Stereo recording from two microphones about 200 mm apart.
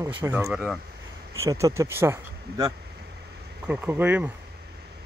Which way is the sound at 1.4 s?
15° right (ahead or behind).